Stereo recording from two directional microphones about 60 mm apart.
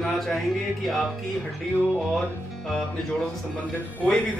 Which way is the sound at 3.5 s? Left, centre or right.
Left.